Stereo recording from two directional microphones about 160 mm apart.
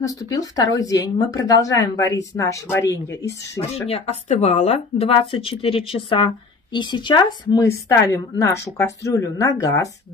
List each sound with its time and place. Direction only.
0.0 s speech: 20° left (ahead or behind)
3.9 s speech: 40° left (ahead or behind); by 9.8 s 20° left (ahead or behind)